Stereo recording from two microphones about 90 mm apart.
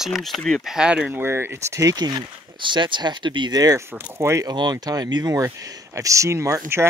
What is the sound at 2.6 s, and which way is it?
Speech, 60° right (ahead or behind).